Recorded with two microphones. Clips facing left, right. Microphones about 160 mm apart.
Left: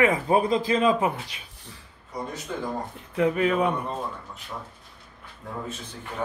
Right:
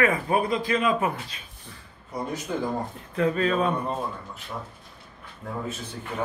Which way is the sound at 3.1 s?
15° left (ahead or behind).